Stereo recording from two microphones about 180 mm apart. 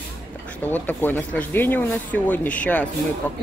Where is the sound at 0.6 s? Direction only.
10° left (ahead or behind).